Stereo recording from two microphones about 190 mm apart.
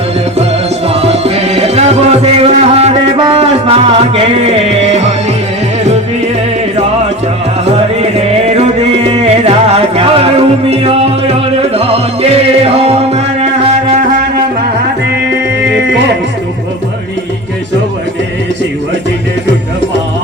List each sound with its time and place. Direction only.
1.0 s music: 30° right (ahead or behind)
8.4 s music: 30° right (ahead or behind)